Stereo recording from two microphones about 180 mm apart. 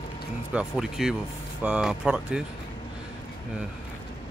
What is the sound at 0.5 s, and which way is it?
Speech, 5° right (ahead or behind).